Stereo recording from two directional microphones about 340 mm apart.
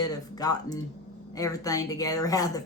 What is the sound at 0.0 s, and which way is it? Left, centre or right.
A woman's voice, centre.